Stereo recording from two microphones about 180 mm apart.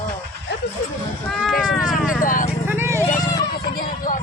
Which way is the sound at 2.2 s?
50° left (ahead or behind).